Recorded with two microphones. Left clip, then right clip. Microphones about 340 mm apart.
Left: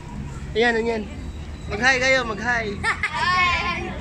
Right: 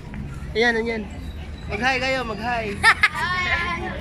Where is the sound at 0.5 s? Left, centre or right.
Centre.